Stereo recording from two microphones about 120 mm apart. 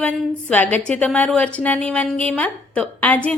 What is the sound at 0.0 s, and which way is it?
A woman's voice, 10° left (ahead or behind).